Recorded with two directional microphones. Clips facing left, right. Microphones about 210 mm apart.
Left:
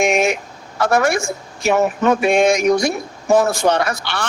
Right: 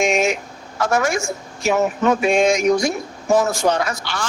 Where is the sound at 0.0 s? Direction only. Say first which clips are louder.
Left 2 dB; 60° left (ahead or behind).